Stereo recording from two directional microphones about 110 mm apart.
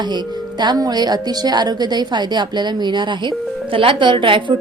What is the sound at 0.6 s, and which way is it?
A woman's voice, 40° right (ahead or behind).